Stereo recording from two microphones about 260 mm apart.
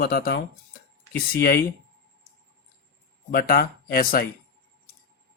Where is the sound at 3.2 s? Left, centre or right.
Left.